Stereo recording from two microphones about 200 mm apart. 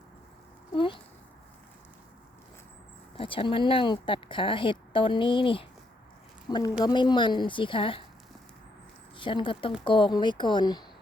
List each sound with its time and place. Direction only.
0.7 s a sound: 25° left (ahead or behind)
3.2 s speech: 25° left (ahead or behind)
9.1 s speech: 25° left (ahead or behind)